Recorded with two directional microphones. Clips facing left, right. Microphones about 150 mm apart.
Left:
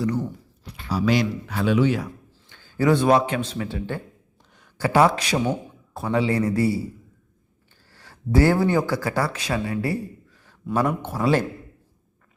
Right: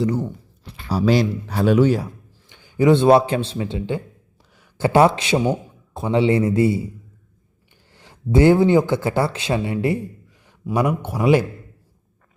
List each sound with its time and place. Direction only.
0.0 s a man's voice: 25° right (ahead or behind); by 2.0 s 40° right (ahead or behind)
2.5 s a man's voice: 15° right (ahead or behind)
7.9 s a man's voice: 20° right (ahead or behind)